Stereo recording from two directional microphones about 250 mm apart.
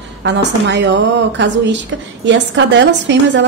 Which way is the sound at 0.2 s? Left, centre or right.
Right.